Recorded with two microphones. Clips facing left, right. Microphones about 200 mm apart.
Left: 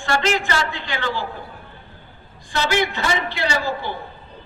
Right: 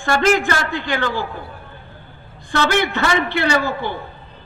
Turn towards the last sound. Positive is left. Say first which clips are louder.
# right 4 dB
turn(degrees=-60)  # may be behind; listen again after turning